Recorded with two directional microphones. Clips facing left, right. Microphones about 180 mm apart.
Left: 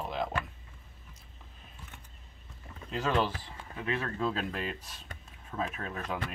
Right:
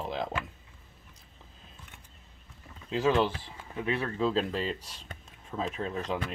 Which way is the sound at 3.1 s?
25° right (ahead or behind).